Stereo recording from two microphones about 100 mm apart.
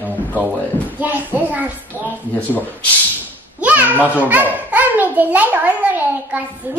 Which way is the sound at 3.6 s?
15° right (ahead or behind).